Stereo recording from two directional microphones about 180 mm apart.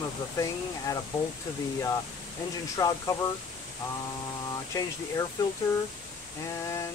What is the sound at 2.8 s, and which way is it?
Speech, 20° left (ahead or behind).